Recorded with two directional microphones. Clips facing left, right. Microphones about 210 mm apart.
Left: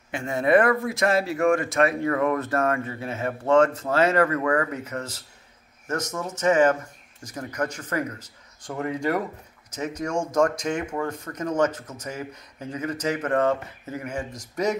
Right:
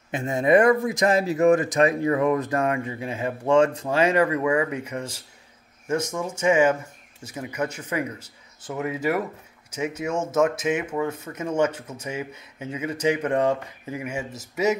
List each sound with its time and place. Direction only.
0.1 s speech: 20° right (ahead or behind)